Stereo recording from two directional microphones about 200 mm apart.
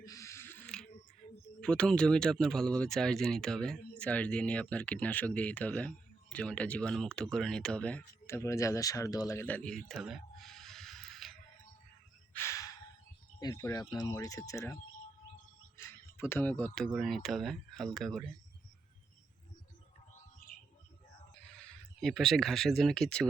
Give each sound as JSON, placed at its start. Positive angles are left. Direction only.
{"t": 0.0, "sound": "a sound", "side_deg": 15}
{"t": 1.6, "sound": "speech", "side_deg": 5}
{"t": 9.9, "sound": "a sound", "side_deg": 0}
{"t": 12.3, "sound": "gasp", "side_deg": 15}
{"t": 13.4, "sound": "speech", "side_deg": 20}
{"t": 16.1, "sound": "speech", "side_deg": 10}
{"t": 22.0, "sound": "speech", "side_deg": 0}